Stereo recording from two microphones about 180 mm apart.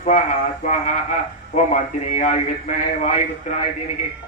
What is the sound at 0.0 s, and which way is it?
A man's voice, 45° left (ahead or behind).